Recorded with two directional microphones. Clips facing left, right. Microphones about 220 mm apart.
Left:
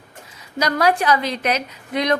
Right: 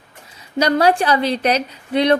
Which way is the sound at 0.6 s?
30° right (ahead or behind).